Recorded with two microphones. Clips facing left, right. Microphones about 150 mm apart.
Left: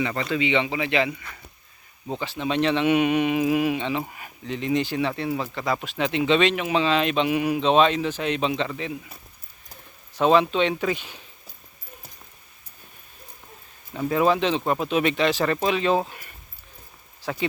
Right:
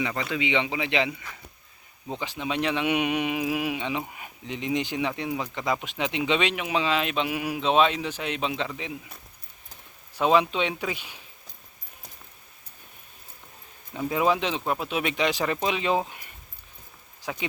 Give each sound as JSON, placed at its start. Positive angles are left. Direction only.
{"t": 0.0, "sound": "speech", "side_deg": -5}
{"t": 2.1, "sound": "speech", "side_deg": -15}
{"t": 10.2, "sound": "speech", "side_deg": -10}
{"t": 13.9, "sound": "speech", "side_deg": -10}